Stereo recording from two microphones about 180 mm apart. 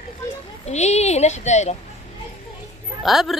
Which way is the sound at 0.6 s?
40° left (ahead or behind).